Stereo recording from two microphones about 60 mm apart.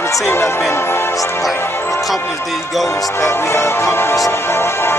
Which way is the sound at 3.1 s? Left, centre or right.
Left.